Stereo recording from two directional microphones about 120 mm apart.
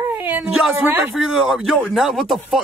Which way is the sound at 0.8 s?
15° right (ahead or behind).